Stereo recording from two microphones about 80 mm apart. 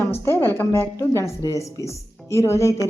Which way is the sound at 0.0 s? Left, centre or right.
Left.